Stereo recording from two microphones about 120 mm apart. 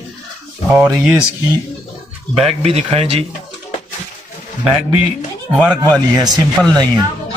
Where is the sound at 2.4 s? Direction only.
55° right (ahead or behind).